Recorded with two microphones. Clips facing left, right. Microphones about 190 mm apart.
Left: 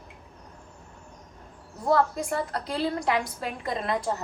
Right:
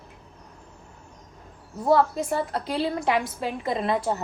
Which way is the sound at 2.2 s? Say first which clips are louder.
Right 3 dB; 25° right (ahead or behind).